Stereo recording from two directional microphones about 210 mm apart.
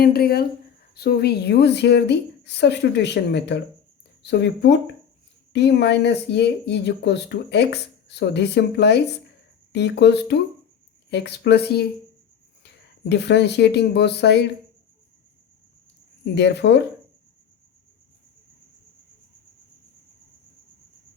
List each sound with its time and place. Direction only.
0.0 s speech: 50° left (ahead or behind)
16.2 s speech: 55° left (ahead or behind)